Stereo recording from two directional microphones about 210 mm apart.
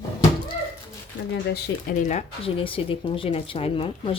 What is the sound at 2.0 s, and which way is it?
Speech, 35° left (ahead or behind).